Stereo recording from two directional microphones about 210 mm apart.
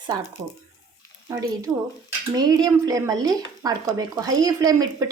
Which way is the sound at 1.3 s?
15° right (ahead or behind).